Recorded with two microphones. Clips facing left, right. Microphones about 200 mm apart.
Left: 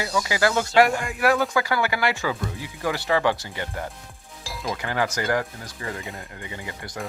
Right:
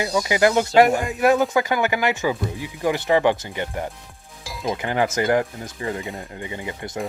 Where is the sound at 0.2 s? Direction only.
20° right (ahead or behind).